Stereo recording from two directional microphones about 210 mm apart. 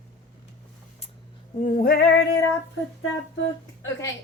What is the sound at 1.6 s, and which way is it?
Female singing, 45° left (ahead or behind).